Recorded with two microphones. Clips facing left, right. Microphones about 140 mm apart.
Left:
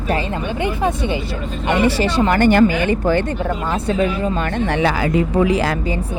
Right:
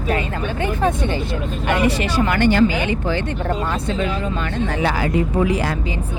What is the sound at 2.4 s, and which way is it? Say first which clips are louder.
Speech: left 3 dB; 50° left (ahead or behind).